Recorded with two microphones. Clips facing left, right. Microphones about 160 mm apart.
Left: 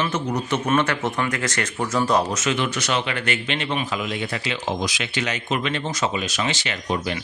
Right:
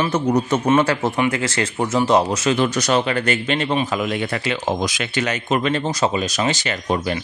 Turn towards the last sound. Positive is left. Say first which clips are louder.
# right 4 dB
turn(degrees=-45)  # may be behind; listen again after turning